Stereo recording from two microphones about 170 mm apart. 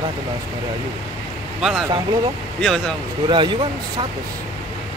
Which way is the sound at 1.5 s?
5° right (ahead or behind).